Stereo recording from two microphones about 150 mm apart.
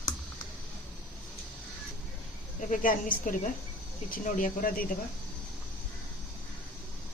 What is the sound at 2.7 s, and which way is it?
Speech, 65° left (ahead or behind).